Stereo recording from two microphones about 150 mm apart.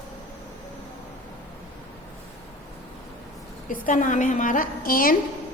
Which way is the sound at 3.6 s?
60° left (ahead or behind).